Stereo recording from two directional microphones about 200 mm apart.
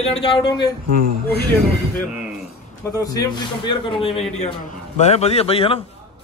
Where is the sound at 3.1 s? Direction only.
20° left (ahead or behind).